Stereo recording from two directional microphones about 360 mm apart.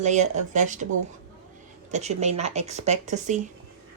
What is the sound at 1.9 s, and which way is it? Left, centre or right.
Speech, centre.